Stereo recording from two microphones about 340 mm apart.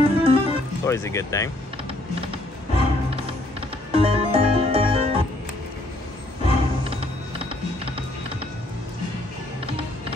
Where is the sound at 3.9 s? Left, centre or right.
Centre.